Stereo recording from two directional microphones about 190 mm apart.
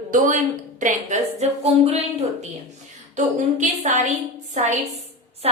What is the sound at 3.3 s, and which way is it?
A woman's voice, 40° right (ahead or behind).